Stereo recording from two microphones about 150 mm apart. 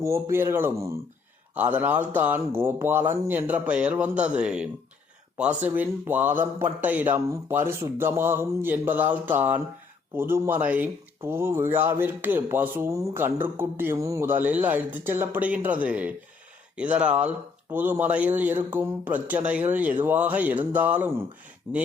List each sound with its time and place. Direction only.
0.0 s speech: 15° right (ahead or behind)